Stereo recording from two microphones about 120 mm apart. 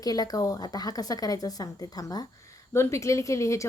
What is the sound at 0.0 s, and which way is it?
A woman's voice, 30° left (ahead or behind).